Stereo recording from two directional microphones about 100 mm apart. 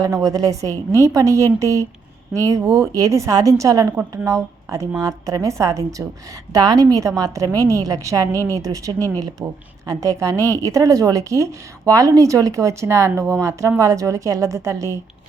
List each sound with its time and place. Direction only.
0.0 s speech: 35° right (ahead or behind)